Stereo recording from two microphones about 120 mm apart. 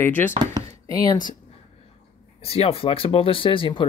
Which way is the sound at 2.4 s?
55° left (ahead or behind).